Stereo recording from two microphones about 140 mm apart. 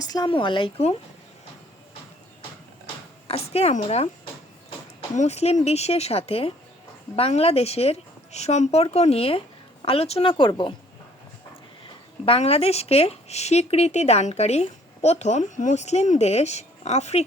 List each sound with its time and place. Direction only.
0.0 s speech: 30° left (ahead or behind)
3.2 s speech: 45° left (ahead or behind)
5.1 s speech: 55° left (ahead or behind); by 10.8 s 35° left (ahead or behind)
12.2 s speech: 45° left (ahead or behind)